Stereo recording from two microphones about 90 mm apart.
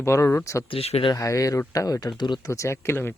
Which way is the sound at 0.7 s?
90° left.